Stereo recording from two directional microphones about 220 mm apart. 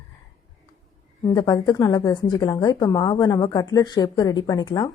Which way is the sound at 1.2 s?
20° left (ahead or behind).